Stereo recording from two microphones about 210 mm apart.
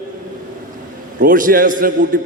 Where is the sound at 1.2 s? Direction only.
40° right (ahead or behind).